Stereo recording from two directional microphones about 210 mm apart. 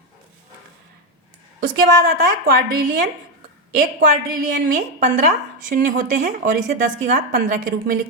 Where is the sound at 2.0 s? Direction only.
45° right (ahead or behind).